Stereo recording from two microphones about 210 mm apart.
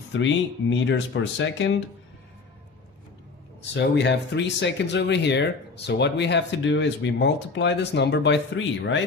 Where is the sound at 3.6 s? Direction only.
55° left (ahead or behind).